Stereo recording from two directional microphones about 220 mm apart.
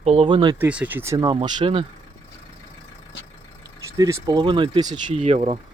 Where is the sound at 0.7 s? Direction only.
5° right (ahead or behind); by 1.9 s 25° right (ahead or behind).